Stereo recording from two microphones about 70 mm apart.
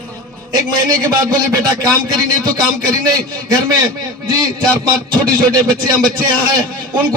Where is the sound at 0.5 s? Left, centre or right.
Right.